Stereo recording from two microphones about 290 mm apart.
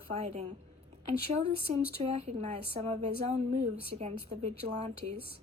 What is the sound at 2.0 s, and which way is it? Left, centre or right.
A woman's voice, right.